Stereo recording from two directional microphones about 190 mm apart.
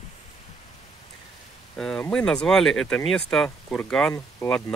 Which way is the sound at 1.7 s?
5° left (ahead or behind).